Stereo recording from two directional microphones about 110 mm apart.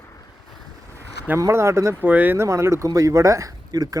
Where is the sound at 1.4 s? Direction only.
25° right (ahead or behind).